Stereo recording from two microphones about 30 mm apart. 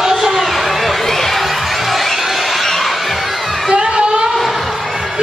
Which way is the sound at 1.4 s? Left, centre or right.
Centre.